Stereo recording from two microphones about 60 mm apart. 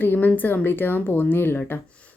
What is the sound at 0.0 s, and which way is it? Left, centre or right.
Speech, left.